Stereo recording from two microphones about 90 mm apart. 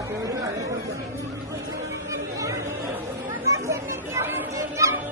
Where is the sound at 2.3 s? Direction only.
35° right (ahead or behind).